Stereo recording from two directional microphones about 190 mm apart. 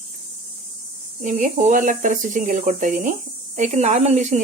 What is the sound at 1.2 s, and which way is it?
Speech, 40° right (ahead or behind).